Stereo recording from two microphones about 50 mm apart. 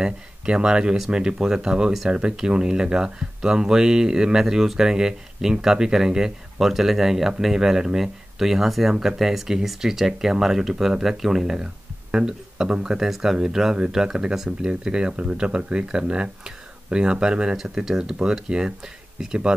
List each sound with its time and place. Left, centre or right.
0.0 s speech: centre